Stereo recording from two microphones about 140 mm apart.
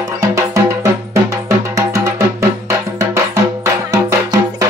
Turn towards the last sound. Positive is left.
turn(degrees=-25)  # may be behind; listen again after turning